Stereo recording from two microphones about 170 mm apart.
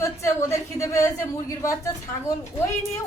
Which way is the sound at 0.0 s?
15° left (ahead or behind).